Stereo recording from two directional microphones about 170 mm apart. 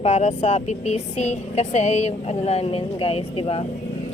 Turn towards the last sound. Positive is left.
turn(degrees=35)  # may be behind; listen again after turning